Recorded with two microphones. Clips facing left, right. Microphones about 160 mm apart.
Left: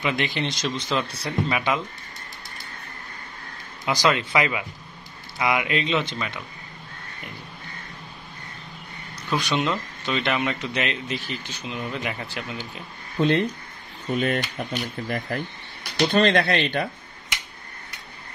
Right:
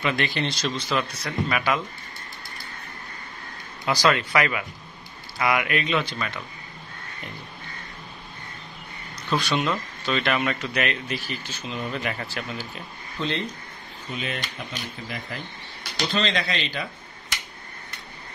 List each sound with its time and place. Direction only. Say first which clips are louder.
0.0 s speech: even; 20° left (ahead or behind)
3.8 s speech: even; 20° left (ahead or behind)
9.3 s speech: even; 15° left (ahead or behind)
13.2 s speech: left 8 dB; 60° left (ahead or behind)